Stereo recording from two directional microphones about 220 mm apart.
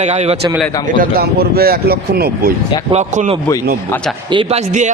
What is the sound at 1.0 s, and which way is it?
Speech, 45° right (ahead or behind).